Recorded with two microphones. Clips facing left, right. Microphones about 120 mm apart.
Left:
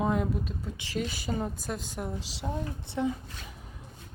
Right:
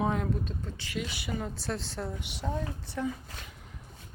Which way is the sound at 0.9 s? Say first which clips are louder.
Left 3 dB; 40° left (ahead or behind).